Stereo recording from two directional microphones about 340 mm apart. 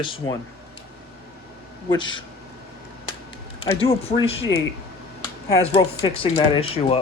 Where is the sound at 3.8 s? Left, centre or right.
Centre.